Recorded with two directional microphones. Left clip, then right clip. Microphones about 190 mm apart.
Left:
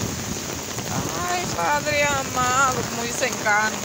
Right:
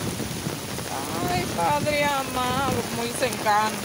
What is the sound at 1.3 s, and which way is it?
Speech, 15° right (ahead or behind).